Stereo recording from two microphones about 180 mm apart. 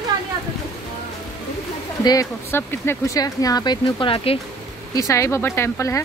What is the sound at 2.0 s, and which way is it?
Speech, 20° left (ahead or behind).